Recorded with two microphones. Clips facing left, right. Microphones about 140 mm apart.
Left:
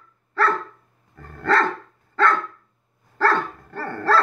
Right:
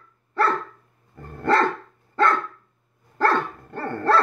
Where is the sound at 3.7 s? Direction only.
20° right (ahead or behind).